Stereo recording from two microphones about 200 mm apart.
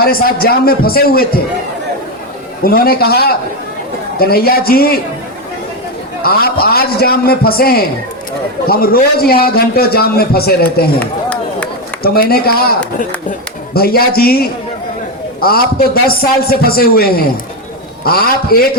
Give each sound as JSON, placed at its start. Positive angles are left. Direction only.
{"t": 0.0, "sound": "a man's voice", "side_deg": 50}
{"t": 2.6, "sound": "a man's voice", "side_deg": 50}
{"t": 6.2, "sound": "a man's voice", "side_deg": 50}
{"t": 13.7, "sound": "a man's voice", "side_deg": 50}